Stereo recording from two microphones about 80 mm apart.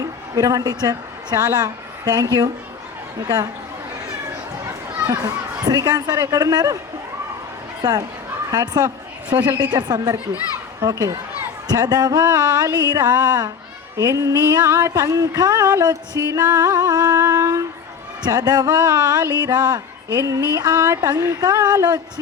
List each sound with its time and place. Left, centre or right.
0.0 s a woman's voice: right
3.2 s music: right
5.0 s a child's voice: right
5.6 s music: right
7.8 s speech: right
8.4 s music: right
9.6 s speech: right
10.8 s music: right
13.9 s music: right
14.6 s a sound: right
14.9 s music: right
19.3 s speech: right
20.1 s music: right